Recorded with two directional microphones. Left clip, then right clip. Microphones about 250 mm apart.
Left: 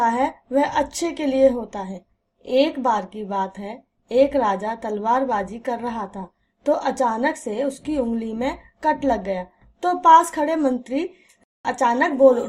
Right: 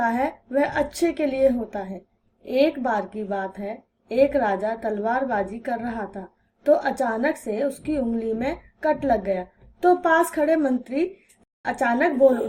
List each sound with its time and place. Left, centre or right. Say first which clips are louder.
0.0 s a woman's voice: left 3 dB; left